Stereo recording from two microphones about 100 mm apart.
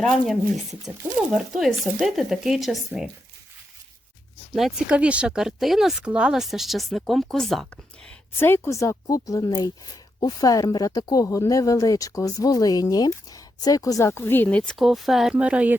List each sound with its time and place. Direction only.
0.0 s speech: centre (ahead or behind)
4.5 s speech: centre (ahead or behind)
4.9 s speech: 10° right (ahead or behind)
8.4 s speech: 25° left (ahead or behind)
14.1 s speech: 20° left (ahead or behind)
14.8 s speech: centre (ahead or behind)